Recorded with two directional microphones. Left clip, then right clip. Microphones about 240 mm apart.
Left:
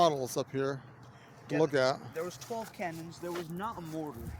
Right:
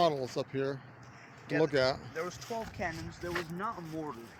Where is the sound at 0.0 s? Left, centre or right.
Centre; by 4.1 s left.